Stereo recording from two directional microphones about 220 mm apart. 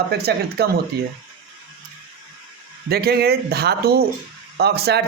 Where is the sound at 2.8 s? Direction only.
45° right (ahead or behind).